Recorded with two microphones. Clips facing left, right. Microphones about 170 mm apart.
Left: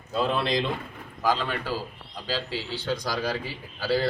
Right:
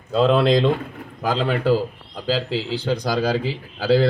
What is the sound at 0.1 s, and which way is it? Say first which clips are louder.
Speech: right 9 dB; 90° right.